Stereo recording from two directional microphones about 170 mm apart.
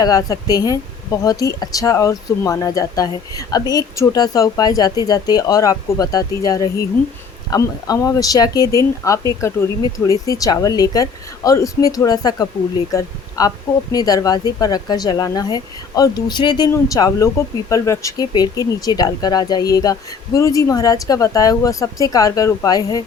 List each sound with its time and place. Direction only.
0.0 s speech: 20° left (ahead or behind)